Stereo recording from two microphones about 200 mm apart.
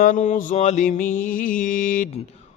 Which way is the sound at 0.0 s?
40° left (ahead or behind).